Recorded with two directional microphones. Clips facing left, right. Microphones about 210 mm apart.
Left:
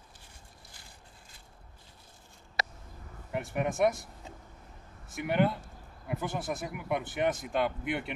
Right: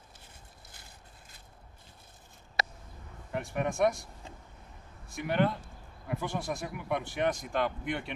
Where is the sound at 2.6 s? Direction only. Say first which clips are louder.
Right 1 dB; 50° right (ahead or behind).